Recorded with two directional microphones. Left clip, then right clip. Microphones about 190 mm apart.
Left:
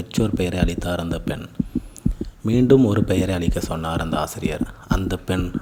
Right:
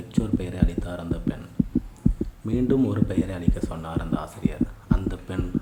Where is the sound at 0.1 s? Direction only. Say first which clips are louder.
Left 6 dB; 35° left (ahead or behind).